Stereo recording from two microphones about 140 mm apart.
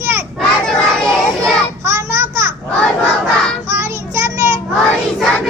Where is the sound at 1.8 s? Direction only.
20° right (ahead or behind).